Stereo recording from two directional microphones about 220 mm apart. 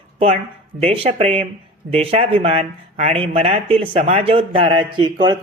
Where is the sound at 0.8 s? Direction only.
25° right (ahead or behind).